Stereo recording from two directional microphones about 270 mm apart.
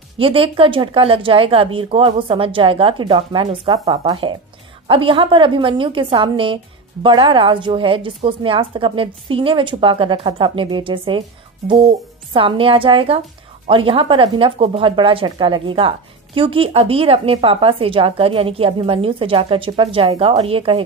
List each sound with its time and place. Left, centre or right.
0.2 s a woman's voice: centre